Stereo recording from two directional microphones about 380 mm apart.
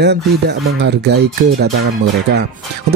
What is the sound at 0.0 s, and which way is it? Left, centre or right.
Speech, right.